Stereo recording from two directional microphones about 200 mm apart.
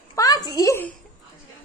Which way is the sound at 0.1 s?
20° left (ahead or behind).